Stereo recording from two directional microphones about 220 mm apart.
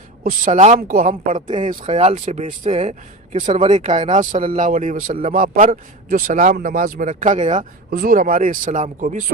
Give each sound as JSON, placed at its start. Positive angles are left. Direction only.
{"t": 0.2, "sound": "a man's voice", "side_deg": -35}